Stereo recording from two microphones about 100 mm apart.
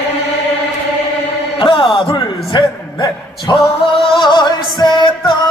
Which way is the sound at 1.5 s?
55° left (ahead or behind).